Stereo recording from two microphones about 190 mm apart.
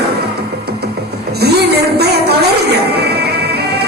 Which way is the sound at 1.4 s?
60° right (ahead or behind).